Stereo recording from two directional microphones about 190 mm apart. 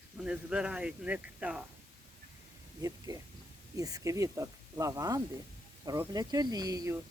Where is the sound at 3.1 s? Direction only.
20° right (ahead or behind).